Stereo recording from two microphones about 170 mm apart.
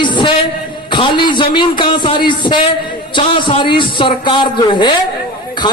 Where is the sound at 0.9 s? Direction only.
30° left (ahead or behind).